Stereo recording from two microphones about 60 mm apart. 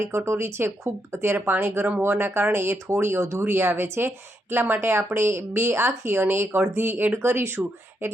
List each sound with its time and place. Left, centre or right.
0.0 s speech: right